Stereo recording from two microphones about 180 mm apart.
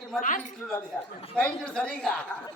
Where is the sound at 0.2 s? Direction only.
45° left (ahead or behind).